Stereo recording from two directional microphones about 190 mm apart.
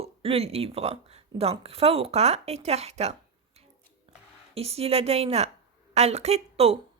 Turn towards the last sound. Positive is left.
turn(degrees=-35)  # may be behind; listen again after turning